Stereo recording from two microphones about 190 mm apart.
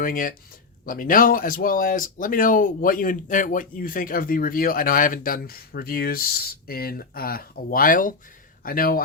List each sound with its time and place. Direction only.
0.0 s speech: 45° left (ahead or behind)